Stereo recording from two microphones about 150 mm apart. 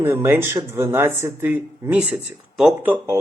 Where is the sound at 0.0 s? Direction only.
15° right (ahead or behind).